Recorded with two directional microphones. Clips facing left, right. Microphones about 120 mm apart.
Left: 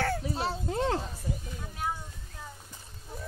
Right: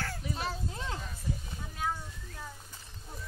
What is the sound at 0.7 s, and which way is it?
Speech, 60° left (ahead or behind).